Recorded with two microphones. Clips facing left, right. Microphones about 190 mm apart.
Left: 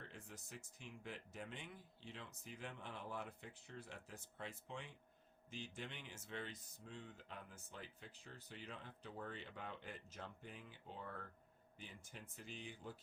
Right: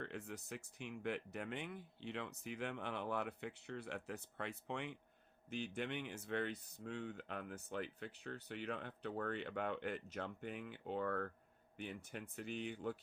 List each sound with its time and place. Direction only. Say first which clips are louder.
0.0 s speech: right 9 dB; 65° right (ahead or behind)